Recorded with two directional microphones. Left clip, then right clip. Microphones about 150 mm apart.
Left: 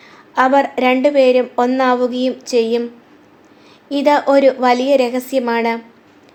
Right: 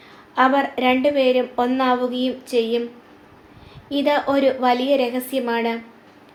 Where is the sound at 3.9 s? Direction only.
45° left (ahead or behind).